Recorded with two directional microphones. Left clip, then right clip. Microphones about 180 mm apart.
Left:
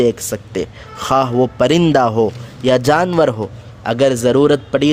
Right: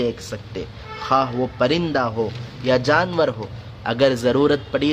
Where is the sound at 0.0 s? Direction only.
45° left (ahead or behind).